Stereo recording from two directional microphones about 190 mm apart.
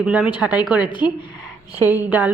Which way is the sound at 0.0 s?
5° right (ahead or behind).